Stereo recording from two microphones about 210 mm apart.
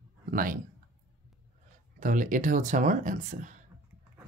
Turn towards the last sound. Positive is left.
turn(degrees=-40)  # may be behind; listen again after turning